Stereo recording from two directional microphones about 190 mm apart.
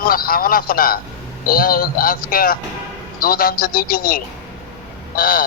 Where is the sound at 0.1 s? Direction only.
50° left (ahead or behind).